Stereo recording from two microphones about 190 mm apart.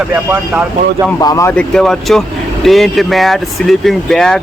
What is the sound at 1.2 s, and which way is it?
Speech, 20° left (ahead or behind).